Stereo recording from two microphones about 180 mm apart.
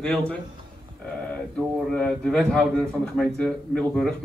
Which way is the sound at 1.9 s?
5° left (ahead or behind).